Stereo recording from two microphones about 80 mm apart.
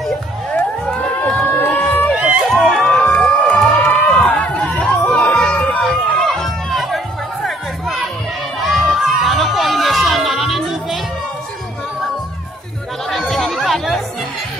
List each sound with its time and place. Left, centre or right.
0.8 s crowd: centre
1.6 s run: centre
2.1 s run: centre
2.5 s a sound: centre
3.1 s music: centre
3.7 s run: centre
4.7 s crowd: centre
5.8 s run: centre
8.6 s a sound: centre
13.1 s chatter: centre